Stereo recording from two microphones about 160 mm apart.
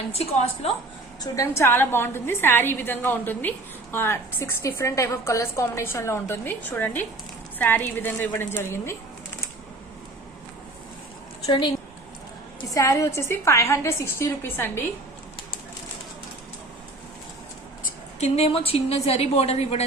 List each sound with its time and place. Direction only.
0.1 s a woman's voice: 40° left (ahead or behind)
1.2 s a woman's voice: 20° left (ahead or behind)
11.4 s a woman's voice: 30° left (ahead or behind)
12.7 s a woman's voice: 20° left (ahead or behind)
18.2 s a woman's voice: 40° left (ahead or behind)